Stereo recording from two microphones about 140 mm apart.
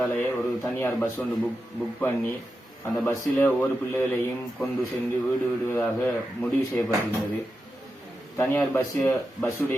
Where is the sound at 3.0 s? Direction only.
15° left (ahead or behind).